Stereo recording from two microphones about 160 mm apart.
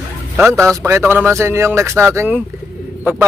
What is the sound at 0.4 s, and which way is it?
A man's voice, 15° right (ahead or behind).